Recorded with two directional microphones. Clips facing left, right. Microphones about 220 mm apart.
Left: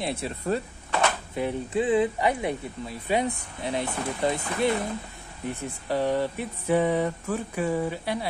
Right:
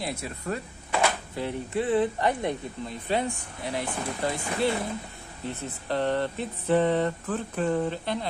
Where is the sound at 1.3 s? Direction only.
15° left (ahead or behind).